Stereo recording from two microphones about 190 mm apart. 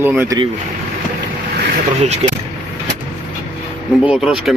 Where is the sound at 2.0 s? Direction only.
35° right (ahead or behind).